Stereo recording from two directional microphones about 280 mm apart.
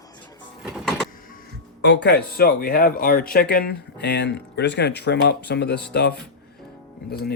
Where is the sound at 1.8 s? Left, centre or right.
Left.